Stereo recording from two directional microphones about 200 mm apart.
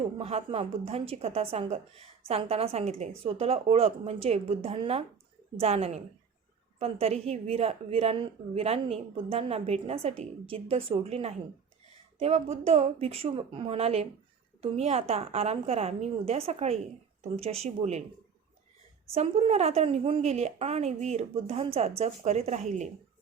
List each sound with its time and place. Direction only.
0.2 s a woman's voice: 30° right (ahead or behind)
19.1 s a woman's voice: 30° right (ahead or behind)